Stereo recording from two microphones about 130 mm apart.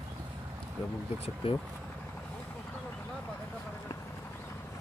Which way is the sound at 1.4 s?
45° left (ahead or behind).